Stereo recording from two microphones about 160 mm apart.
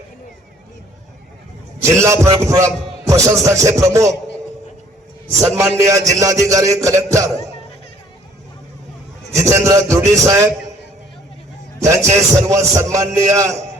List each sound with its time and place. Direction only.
1.8 s a man's voice: 20° right (ahead or behind)
5.4 s a man's voice: 20° right (ahead or behind)
9.3 s a man's voice: 20° right (ahead or behind)
11.8 s a man's voice: 20° right (ahead or behind)